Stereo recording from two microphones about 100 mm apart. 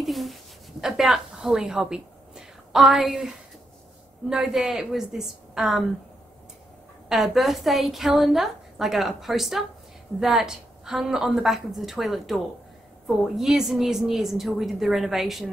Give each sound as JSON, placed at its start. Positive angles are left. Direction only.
{"t": 0.0, "sound": "a sound", "side_deg": 0}
{"t": 4.3, "sound": "a woman's voice", "side_deg": -5}
{"t": 7.1, "sound": "a woman's voice", "side_deg": 0}